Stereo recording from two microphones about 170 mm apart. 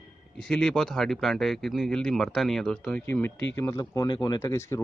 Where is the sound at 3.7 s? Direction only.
25° left (ahead or behind).